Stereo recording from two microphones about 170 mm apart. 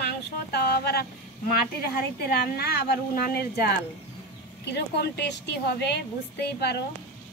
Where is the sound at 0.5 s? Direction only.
70° left (ahead or behind).